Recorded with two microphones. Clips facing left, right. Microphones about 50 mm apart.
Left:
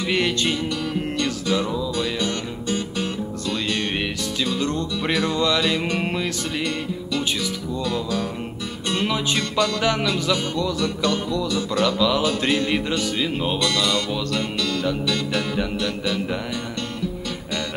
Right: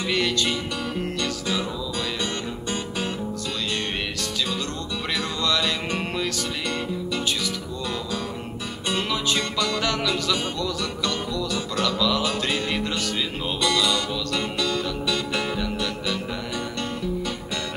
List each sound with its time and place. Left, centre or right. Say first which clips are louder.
0.1 s music: left 2 dB; centre
1.6 s music: left 4 dB; centre
2.2 s guitar: left 3 dB; centre
4.6 s music: left 5 dB; left
7.8 s music: left 5 dB; centre
9.0 s music: left 3 dB; centre
13.6 s music: right 3 dB; centre